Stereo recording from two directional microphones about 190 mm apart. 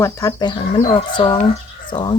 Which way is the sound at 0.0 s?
15° left (ahead or behind).